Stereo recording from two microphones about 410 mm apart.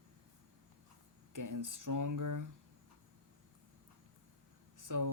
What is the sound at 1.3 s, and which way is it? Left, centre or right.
Speech, right.